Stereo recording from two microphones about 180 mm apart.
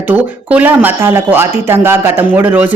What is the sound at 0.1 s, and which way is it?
Speech, 10° right (ahead or behind).